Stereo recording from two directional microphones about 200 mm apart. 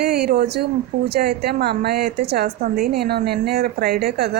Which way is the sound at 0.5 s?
55° right (ahead or behind).